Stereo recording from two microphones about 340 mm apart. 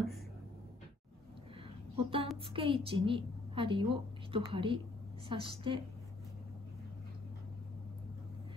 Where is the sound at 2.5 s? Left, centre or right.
Centre.